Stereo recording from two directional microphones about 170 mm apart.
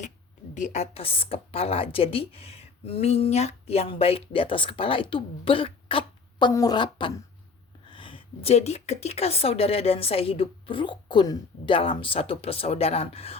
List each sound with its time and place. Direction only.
0.5 s a woman's voice: 45° left (ahead or behind)